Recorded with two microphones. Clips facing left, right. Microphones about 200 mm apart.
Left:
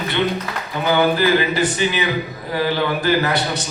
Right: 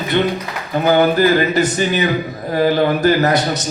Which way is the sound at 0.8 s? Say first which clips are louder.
Right 4 dB; 45° right (ahead or behind).